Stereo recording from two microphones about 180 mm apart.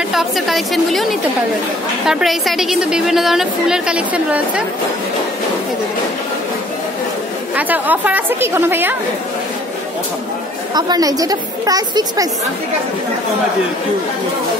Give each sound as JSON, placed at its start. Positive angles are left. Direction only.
{"t": 0.1, "sound": "a woman's voice", "side_deg": 0}
{"t": 7.5, "sound": "a woman's voice", "side_deg": -10}
{"t": 10.7, "sound": "a woman's voice", "side_deg": -20}